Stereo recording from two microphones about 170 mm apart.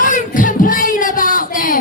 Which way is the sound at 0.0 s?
50° left (ahead or behind).